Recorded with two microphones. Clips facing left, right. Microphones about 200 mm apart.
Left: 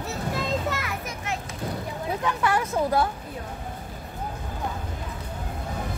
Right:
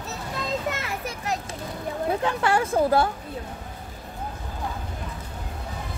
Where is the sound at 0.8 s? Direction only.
35° right (ahead or behind).